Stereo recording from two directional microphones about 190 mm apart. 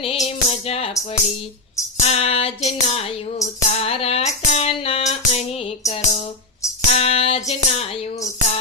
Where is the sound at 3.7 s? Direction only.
30° left (ahead or behind).